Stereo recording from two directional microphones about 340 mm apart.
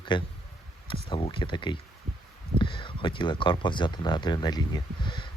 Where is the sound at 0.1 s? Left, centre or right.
Centre.